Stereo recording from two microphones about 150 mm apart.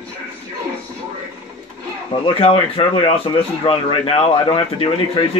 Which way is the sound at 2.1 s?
40° left (ahead or behind).